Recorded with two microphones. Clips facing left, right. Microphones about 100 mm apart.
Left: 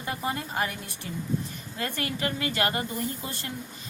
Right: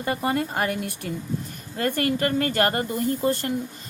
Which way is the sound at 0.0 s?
65° right (ahead or behind).